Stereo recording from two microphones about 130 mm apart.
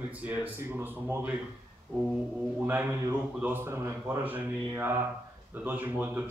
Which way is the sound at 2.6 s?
15° right (ahead or behind).